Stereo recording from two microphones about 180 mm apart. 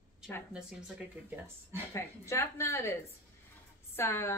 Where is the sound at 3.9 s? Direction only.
15° left (ahead or behind).